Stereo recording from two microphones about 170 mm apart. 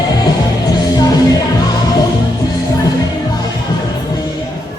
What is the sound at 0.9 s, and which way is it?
Music, 20° left (ahead or behind).